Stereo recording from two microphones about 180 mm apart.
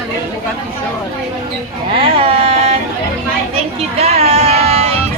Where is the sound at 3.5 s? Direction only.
35° right (ahead or behind).